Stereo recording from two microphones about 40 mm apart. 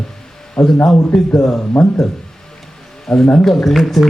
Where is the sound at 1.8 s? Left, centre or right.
Left.